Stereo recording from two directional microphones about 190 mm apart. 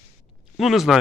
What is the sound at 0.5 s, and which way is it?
Speech, centre (ahead or behind).